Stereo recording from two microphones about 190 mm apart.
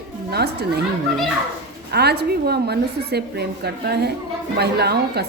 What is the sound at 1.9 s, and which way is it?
A woman's voice, 60° right (ahead or behind).